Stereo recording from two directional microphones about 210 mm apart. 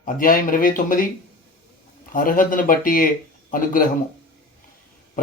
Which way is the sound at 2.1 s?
40° left (ahead or behind).